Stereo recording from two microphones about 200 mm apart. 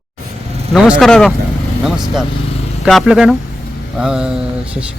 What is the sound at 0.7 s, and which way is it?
Speech, 5° right (ahead or behind).